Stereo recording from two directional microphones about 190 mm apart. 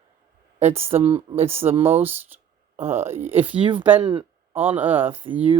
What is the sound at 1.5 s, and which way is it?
Speech, 10° right (ahead or behind).